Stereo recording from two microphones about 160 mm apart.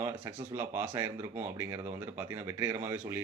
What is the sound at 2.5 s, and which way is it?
Speech, 15° right (ahead or behind).